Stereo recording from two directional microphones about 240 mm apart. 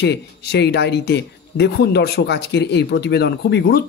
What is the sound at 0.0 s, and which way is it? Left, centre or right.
Speech, left.